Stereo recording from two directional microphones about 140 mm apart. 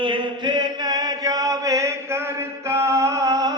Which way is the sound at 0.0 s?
35° right (ahead or behind).